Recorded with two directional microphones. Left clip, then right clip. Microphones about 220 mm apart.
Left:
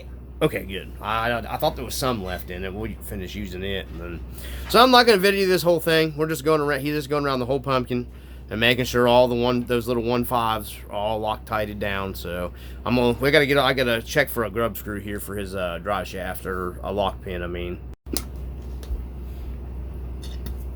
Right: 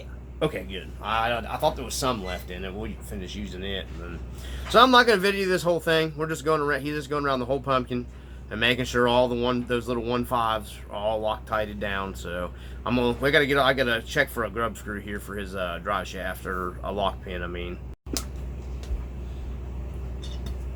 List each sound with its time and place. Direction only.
0.3 s speech: 50° left (ahead or behind)